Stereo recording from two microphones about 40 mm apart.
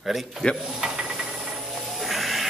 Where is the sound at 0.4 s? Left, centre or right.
Centre.